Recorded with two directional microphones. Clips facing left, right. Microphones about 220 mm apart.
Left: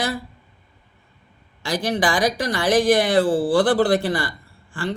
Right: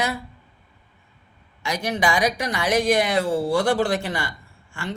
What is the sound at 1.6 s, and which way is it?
Speech, 30° left (ahead or behind).